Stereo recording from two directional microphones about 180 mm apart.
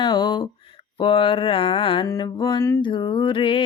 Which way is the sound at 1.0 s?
30° left (ahead or behind).